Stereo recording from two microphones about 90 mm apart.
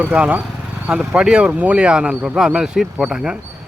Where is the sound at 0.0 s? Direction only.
15° right (ahead or behind).